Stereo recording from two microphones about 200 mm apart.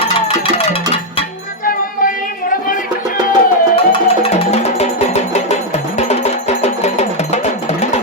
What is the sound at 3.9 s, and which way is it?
Music, 30° left (ahead or behind).